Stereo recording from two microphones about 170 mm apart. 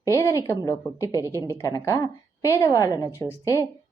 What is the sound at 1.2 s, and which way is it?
Speech, 15° right (ahead or behind).